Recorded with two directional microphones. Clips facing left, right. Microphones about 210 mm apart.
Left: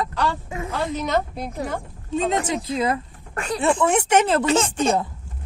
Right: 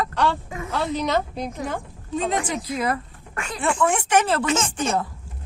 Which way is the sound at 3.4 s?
35° left (ahead or behind).